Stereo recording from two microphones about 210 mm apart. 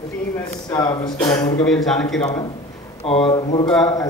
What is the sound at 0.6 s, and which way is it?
Speech, 20° left (ahead or behind).